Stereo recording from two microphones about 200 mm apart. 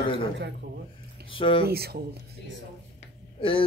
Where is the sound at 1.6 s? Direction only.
50° right (ahead or behind).